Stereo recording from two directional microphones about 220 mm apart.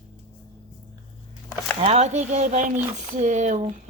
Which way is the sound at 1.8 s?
30° right (ahead or behind).